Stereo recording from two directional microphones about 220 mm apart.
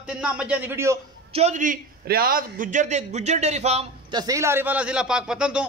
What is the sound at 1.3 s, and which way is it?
A man's voice, 30° right (ahead or behind).